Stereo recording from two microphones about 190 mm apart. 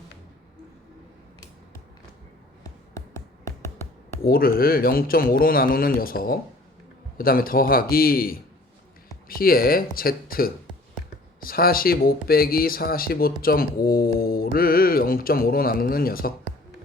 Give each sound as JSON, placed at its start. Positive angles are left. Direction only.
{"t": 2.6, "sound": "music", "side_deg": 15}
{"t": 4.2, "sound": "speech", "side_deg": 50}